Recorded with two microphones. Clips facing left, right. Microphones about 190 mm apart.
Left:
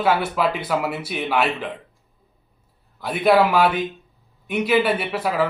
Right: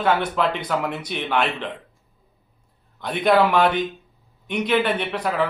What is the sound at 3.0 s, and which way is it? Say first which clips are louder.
Speech: left 1 dB; 5° left (ahead or behind).